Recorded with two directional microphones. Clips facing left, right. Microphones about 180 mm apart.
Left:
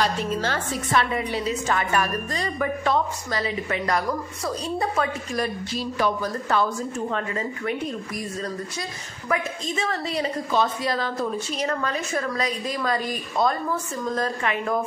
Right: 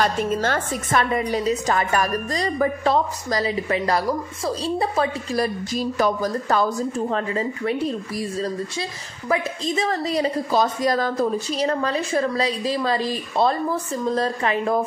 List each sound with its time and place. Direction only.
0.0 s a woman's voice: 50° right (ahead or behind); by 14.8 s 35° right (ahead or behind)